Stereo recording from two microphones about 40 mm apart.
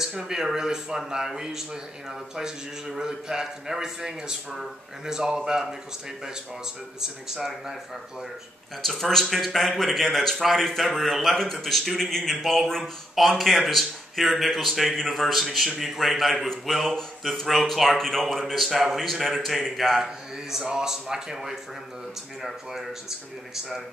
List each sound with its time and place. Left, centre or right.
0.0 s a man's voice: centre
7.0 s a man's voice: centre
8.8 s speech: centre
18.5 s a man's voice: centre